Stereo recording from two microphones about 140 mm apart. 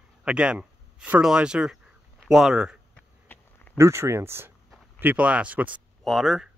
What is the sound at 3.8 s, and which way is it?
Speech, 20° right (ahead or behind).